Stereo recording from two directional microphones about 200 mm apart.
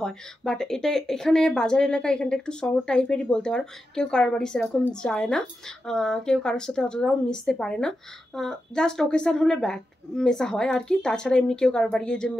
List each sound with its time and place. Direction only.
0.0 s speech: centre (ahead or behind)